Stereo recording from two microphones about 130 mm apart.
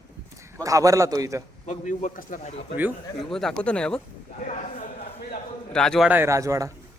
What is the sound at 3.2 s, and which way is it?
Speech, 5° left (ahead or behind).